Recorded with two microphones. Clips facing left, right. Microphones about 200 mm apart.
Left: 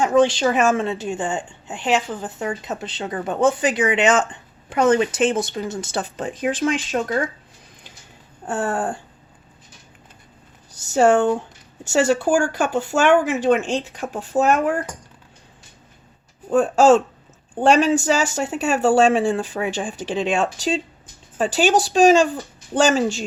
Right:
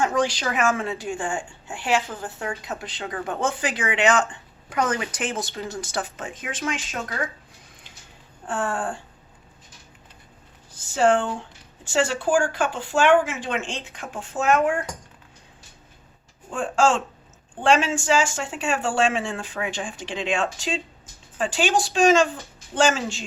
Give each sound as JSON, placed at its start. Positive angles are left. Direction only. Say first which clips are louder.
{"t": 0.0, "sound": "a woman's voice", "louder": "left 7 dB", "side_deg": 25}
{"t": 6.0, "sound": "speech", "louder": "left 8 dB", "side_deg": 35}
{"t": 8.4, "sound": "speech", "louder": "left 4 dB", "side_deg": 40}
{"t": 10.8, "sound": "speech", "louder": "left 4 dB", "side_deg": 45}
{"t": 16.5, "sound": "speech", "louder": "left 8 dB", "side_deg": 40}